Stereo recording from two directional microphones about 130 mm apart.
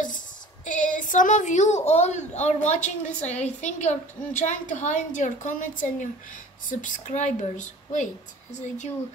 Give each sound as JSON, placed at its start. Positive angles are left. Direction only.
{"t": 0.7, "sound": "a woman's voice", "side_deg": 80}